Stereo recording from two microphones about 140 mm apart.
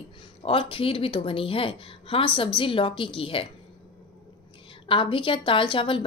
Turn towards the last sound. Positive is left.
turn(degrees=35)  # may be behind; listen again after turning